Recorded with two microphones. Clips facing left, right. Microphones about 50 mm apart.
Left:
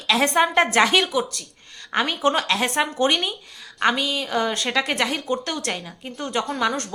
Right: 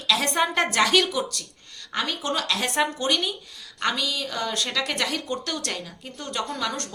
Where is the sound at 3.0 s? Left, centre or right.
Left.